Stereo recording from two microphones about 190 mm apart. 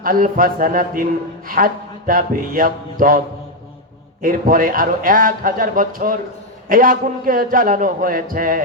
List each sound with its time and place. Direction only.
0.0 s a man's voice: 50° right (ahead or behind)
4.2 s a man's voice: 45° right (ahead or behind)